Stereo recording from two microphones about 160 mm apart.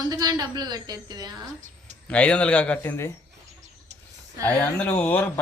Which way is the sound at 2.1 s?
5° left (ahead or behind).